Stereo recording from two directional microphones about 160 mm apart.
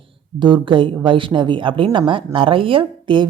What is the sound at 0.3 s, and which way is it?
A woman's voice, 30° right (ahead or behind).